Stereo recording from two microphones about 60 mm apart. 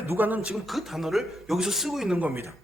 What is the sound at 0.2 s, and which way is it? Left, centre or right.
Speech, right.